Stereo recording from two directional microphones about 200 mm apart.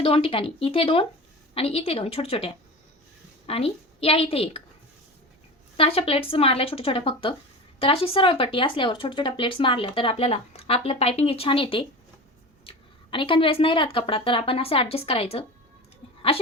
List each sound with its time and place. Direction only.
0.0 s a woman's voice: 25° left (ahead or behind)
5.7 s speech: 30° left (ahead or behind)